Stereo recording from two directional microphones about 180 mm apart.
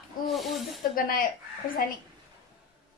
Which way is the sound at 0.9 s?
50° left (ahead or behind).